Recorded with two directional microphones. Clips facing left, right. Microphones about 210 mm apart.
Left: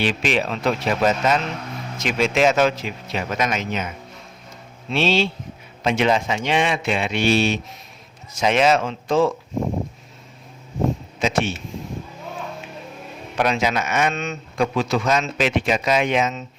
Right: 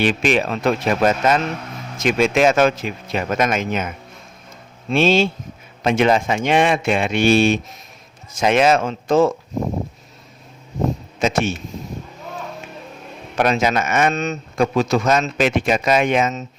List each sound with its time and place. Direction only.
0.0 s a man's voice: 50° right (ahead or behind)
11.2 s a man's voice: 45° right (ahead or behind)
13.3 s a man's voice: 45° right (ahead or behind)